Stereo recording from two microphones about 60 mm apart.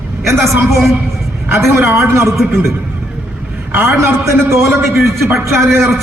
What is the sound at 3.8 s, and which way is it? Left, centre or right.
A man's voice, right.